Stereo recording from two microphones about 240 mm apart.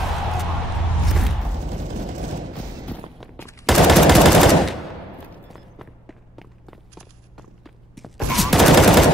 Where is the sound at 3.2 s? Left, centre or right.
Centre.